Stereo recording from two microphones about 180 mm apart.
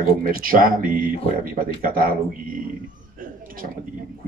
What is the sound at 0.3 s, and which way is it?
Speech, 50° right (ahead or behind).